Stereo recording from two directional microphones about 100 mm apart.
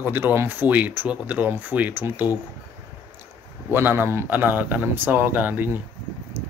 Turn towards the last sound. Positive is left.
turn(degrees=-20)  # may be behind; listen again after turning